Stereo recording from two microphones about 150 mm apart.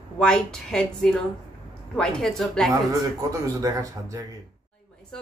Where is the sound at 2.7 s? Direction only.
20° right (ahead or behind).